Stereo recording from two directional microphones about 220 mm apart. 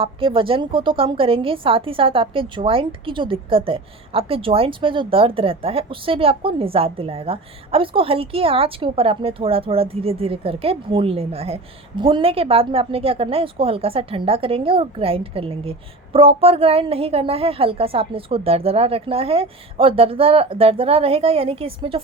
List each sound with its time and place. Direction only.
0.0 s a woman's voice: 25° right (ahead or behind)